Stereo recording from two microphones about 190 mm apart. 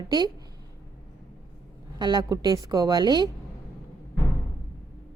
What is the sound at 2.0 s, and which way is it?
Speech, 20° right (ahead or behind).